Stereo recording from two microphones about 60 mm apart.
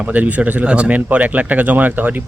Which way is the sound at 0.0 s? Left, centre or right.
Right.